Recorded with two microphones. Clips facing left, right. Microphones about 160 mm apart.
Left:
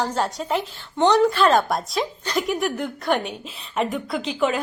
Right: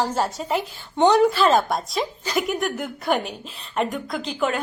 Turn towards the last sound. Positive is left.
turn(degrees=0)  # may be behind; listen again after turning